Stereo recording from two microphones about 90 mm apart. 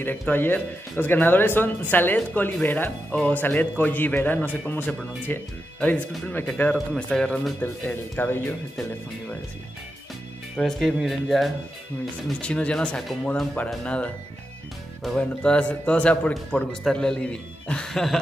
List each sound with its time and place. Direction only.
0.3 s speech: 20° left (ahead or behind); by 7.5 s 5° left (ahead or behind)
7.6 s speech: 25° left (ahead or behind)
10.6 s speech: centre (ahead or behind)
12.4 s speech: 10° left (ahead or behind)
15.1 s speech: 10° left (ahead or behind)